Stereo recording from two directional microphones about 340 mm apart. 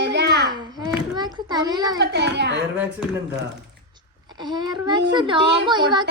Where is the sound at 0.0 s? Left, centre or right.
Right.